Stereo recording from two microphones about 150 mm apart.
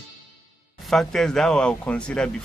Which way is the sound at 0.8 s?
Centre (ahead or behind).